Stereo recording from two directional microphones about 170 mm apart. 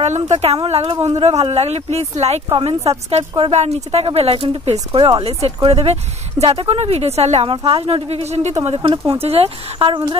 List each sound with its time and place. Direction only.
0.3 s speech: 40° right (ahead or behind)